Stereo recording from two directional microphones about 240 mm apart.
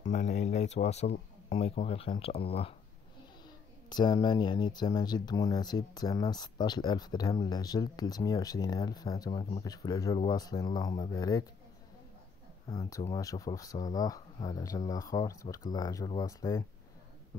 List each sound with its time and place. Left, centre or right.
0.0 s speech: left
12.6 s speech: centre